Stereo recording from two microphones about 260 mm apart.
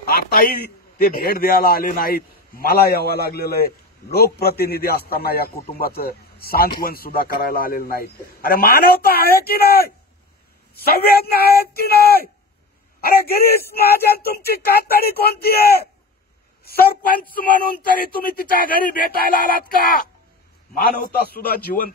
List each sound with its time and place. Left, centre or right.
0.3 s a man's voice: left
13.7 s a man's voice: left
21.3 s a man's voice: left